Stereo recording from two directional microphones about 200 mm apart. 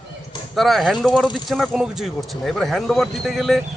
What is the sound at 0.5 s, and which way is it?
Speech, centre (ahead or behind).